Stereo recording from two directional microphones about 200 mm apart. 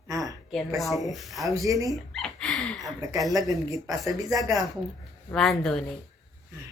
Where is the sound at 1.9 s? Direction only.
Centre (ahead or behind).